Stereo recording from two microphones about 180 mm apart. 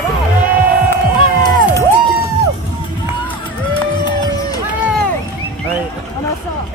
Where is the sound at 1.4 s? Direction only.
25° left (ahead or behind).